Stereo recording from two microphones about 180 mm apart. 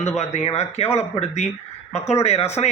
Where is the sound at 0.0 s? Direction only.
35° left (ahead or behind).